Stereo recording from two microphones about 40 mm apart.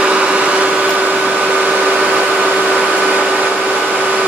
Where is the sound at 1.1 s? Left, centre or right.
Right.